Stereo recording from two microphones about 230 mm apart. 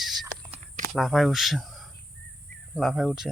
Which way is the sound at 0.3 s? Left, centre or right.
Right.